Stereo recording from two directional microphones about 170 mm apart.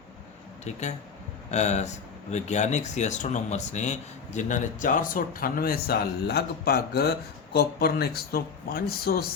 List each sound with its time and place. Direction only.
0.6 s speech: 40° left (ahead or behind); by 9.3 s 65° left (ahead or behind)